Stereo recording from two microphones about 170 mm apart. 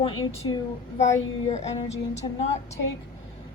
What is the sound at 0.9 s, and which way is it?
A woman's voice, 45° left (ahead or behind).